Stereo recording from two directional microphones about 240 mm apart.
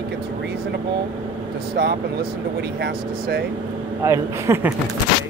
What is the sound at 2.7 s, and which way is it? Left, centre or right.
Speech, right.